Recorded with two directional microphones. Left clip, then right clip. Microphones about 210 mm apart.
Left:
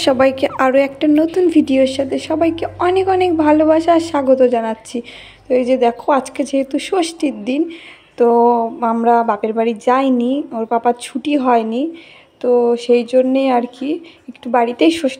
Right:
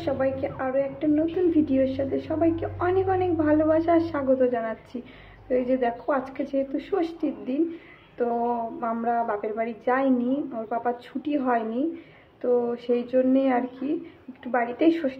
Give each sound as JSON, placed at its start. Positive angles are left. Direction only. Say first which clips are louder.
{"t": 0.0, "sound": "a woman's voice", "louder": "left 13 dB", "side_deg": 55}